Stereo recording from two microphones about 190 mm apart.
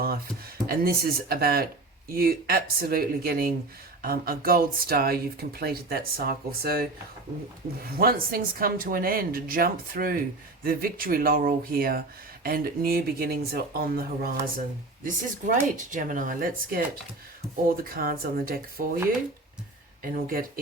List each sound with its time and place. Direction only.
0.7 s speech: 50° right (ahead or behind)
7.9 s speech: 50° right (ahead or behind)
20.0 s speech: 50° right (ahead or behind)